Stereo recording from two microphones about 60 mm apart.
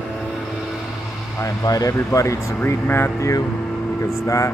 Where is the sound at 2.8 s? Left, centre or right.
Left.